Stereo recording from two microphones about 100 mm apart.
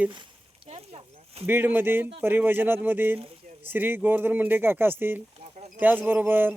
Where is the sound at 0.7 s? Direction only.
85° right.